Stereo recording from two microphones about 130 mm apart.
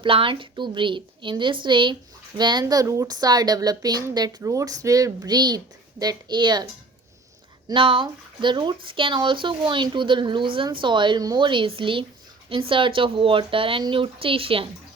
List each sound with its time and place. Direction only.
0.0 s speech: 40° right (ahead or behind)
7.7 s a woman's voice: 40° right (ahead or behind)